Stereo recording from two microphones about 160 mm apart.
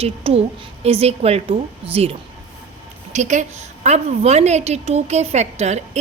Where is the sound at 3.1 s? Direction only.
45° right (ahead or behind).